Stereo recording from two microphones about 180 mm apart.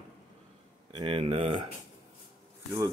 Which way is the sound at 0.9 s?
30° right (ahead or behind).